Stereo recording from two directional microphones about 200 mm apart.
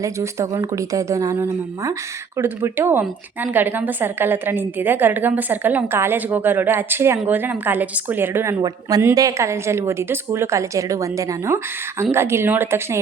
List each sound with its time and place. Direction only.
0.0 s a woman's voice: 15° right (ahead or behind)